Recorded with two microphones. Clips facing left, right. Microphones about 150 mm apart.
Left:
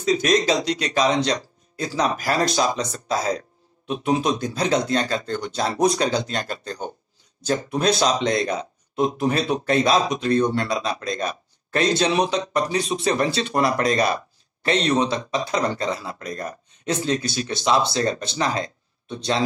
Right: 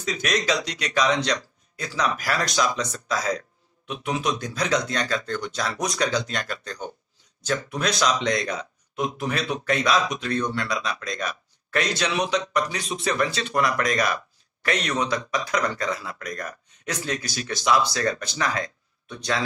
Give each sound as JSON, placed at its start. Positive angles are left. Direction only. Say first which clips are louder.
{"t": 0.0, "sound": "speech", "louder": "left 7 dB", "side_deg": 35}